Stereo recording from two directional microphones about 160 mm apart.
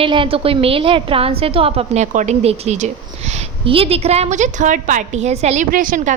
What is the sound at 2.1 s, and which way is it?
A woman's voice, 45° right (ahead or behind).